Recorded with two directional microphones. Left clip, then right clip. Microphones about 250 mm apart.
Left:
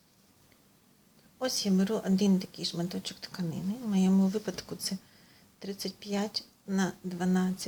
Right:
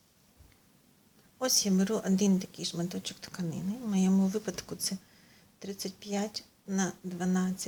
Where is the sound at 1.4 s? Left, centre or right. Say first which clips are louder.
Right 2 dB; centre.